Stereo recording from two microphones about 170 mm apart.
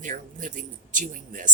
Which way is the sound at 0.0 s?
50° right (ahead or behind).